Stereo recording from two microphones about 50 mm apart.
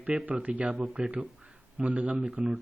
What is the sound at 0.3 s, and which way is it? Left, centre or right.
Speech, right.